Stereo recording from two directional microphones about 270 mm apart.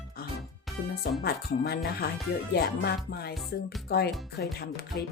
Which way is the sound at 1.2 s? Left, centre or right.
Left.